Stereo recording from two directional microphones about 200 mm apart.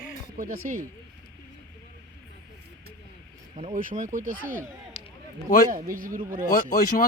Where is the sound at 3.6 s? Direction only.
35° right (ahead or behind).